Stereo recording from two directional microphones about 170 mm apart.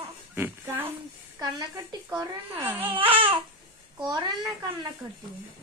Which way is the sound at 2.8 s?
30° right (ahead or behind).